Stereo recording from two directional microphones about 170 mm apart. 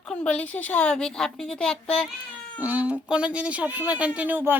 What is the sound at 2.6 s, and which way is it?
Speech, 10° right (ahead or behind).